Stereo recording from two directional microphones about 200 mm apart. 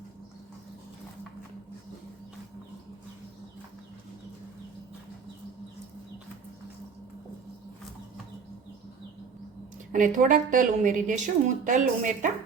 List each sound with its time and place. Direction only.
9.9 s a woman's voice: 40° right (ahead or behind)